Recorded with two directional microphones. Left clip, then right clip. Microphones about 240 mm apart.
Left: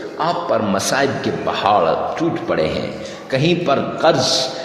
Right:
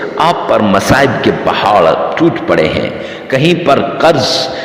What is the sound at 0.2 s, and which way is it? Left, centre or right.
A man's voice, right.